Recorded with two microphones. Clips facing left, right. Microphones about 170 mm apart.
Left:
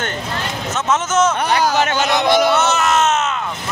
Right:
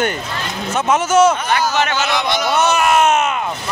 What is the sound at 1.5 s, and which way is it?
Speech, 40° left (ahead or behind).